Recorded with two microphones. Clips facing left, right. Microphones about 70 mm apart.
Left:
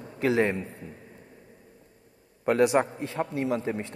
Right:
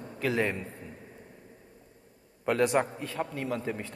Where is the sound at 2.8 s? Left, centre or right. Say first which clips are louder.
Left 3 dB; left.